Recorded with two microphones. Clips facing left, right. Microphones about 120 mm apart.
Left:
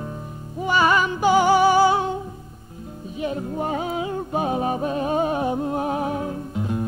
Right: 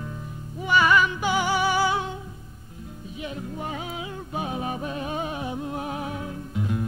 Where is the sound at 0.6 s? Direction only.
35° left (ahead or behind).